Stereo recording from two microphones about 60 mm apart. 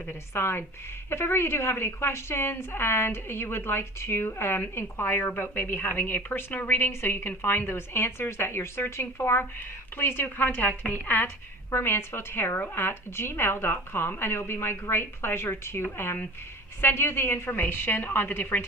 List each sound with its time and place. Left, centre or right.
0.1 s a woman's voice: left
11.7 s a woman's voice: left